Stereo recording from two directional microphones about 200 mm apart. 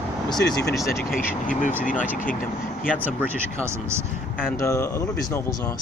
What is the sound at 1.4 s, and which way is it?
Speech, 40° left (ahead or behind).